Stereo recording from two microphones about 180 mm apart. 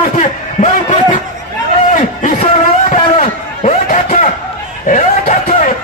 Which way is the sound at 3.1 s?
45° left (ahead or behind).